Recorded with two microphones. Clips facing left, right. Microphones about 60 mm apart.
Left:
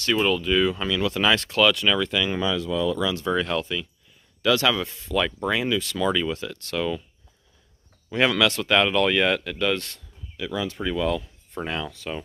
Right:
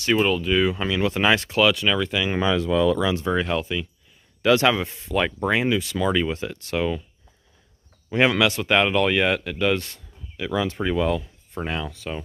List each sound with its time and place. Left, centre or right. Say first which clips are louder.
0.0 s speech: right 2 dB; centre
2.3 s speech: right 4 dB; right
3.0 s speech: right 2 dB; right; by 3.8 s centre
4.4 s speech: right 3 dB; right
8.1 s speech: right 2 dB; right
10.3 s speech: right 4 dB; right
11.5 s speech: right 1 dB; centre